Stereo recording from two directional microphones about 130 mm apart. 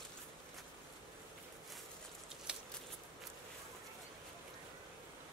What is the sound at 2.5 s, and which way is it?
Scissors, 5° right (ahead or behind).